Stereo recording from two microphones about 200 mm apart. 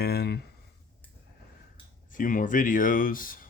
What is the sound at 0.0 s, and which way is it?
Speech, 50° left (ahead or behind).